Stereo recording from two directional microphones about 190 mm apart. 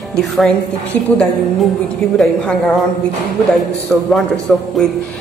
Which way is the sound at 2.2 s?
Centre (ahead or behind).